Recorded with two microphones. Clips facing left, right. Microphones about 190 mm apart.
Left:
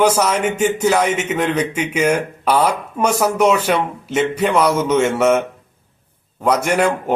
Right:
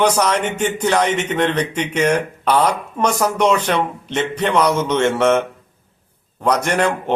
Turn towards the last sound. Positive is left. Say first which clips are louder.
# left 2 dB
turn(degrees=10)  # may be behind; listen again after turning